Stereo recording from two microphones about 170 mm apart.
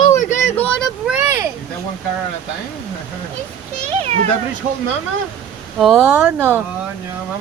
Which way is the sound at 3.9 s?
35° right (ahead or behind).